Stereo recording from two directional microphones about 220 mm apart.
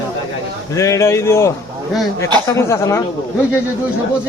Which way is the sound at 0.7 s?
15° left (ahead or behind).